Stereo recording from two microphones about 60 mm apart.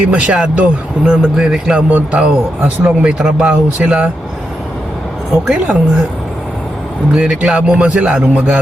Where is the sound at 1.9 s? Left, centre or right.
Right.